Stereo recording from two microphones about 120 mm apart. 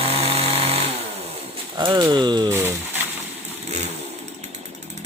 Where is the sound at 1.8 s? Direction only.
40° right (ahead or behind).